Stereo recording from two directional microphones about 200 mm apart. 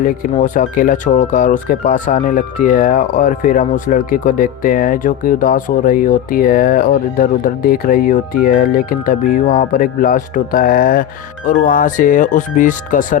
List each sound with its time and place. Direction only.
0.0 s speech: 40° left (ahead or behind)